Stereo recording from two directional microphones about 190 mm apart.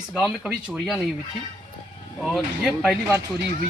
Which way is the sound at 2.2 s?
Centre (ahead or behind).